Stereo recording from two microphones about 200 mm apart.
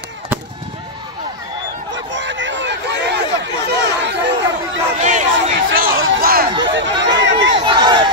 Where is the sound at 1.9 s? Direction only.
65° right (ahead or behind).